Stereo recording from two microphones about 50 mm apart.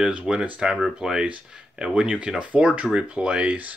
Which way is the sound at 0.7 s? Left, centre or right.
Centre.